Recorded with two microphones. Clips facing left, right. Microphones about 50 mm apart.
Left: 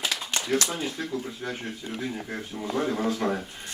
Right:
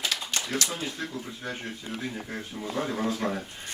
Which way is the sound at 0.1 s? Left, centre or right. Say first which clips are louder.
Left 1 dB; left.